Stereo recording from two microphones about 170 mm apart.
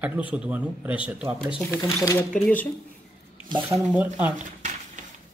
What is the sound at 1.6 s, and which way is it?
Speech, 15° left (ahead or behind).